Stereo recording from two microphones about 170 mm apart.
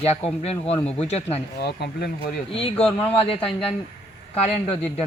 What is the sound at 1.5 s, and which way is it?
Speech, 75° left (ahead or behind).